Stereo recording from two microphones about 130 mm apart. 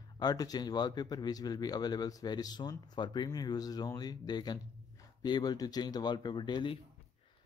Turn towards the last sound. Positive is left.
turn(degrees=35)  # may be behind; listen again after turning